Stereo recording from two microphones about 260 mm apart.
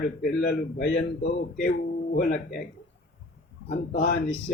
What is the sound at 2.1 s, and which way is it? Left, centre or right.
Speech, left.